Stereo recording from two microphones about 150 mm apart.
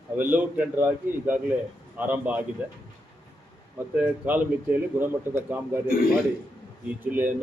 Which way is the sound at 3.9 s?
10° right (ahead or behind).